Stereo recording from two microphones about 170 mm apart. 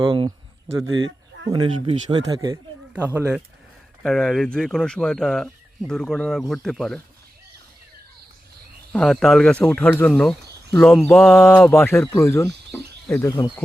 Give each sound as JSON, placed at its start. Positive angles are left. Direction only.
{"t": 0.0, "sound": "speech", "side_deg": -30}
{"t": 1.5, "sound": "speech", "side_deg": -25}
{"t": 2.9, "sound": "speech", "side_deg": -10}
{"t": 4.0, "sound": "speech", "side_deg": 5}
{"t": 8.9, "sound": "speech", "side_deg": 0}
{"t": 11.7, "sound": "speech", "side_deg": 15}